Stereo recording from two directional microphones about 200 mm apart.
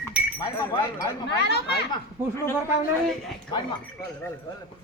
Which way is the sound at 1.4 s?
55° left (ahead or behind).